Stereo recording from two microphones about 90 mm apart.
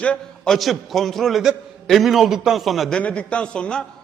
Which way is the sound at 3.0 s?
15° left (ahead or behind).